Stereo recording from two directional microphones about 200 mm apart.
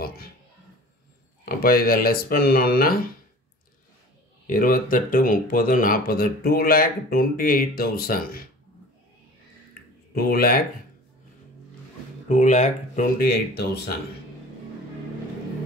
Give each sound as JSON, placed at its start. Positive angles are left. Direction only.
{"t": 1.4, "sound": "speech", "side_deg": 50}
{"t": 4.5, "sound": "speech", "side_deg": 45}
{"t": 10.1, "sound": "speech", "side_deg": 50}
{"t": 12.3, "sound": "speech", "side_deg": 35}